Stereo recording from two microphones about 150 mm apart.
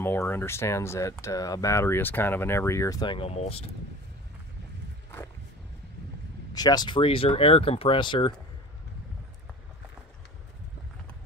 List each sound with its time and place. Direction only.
0.0 s speech: 15° left (ahead or behind); by 3.7 s 40° left (ahead or behind)
6.5 s speech: 25° left (ahead or behind)